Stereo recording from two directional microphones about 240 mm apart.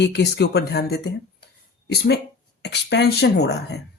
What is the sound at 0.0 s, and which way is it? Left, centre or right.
Speech, left.